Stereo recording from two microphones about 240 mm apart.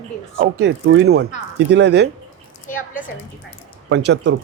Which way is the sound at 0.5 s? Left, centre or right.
Right.